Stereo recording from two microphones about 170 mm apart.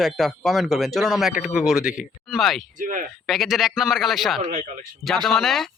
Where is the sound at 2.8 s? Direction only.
50° right (ahead or behind).